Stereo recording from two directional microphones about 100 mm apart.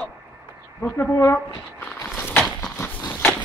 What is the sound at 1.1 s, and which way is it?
Speech, 25° left (ahead or behind).